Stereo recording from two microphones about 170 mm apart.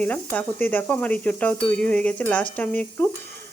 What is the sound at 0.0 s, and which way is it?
Stir, 10° left (ahead or behind).